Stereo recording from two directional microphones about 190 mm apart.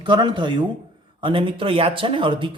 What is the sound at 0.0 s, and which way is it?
A man's voice, 25° right (ahead or behind).